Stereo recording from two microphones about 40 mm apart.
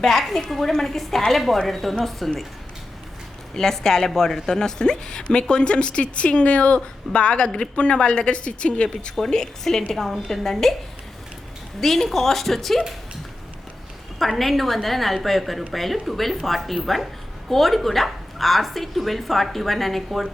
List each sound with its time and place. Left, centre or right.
0.0 s speech: centre
3.5 s a woman's voice: centre
11.8 s a woman's voice: centre
14.2 s speech: centre